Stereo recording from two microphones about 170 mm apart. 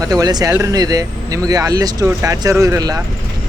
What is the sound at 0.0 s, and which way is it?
Speech, 20° right (ahead or behind).